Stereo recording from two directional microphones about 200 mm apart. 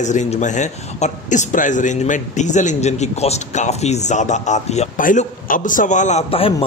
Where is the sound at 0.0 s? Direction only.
35° left (ahead or behind).